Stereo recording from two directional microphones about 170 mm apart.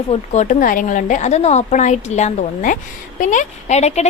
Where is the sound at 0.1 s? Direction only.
45° left (ahead or behind).